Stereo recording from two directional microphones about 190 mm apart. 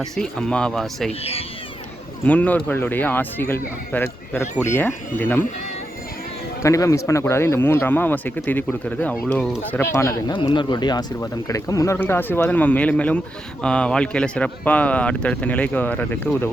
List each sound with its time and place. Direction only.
0.0 s speech: 5° left (ahead or behind)
1.2 s speech: 30° left (ahead or behind)
2.2 s speech: 10° left (ahead or behind)
6.6 s speech: 15° left (ahead or behind)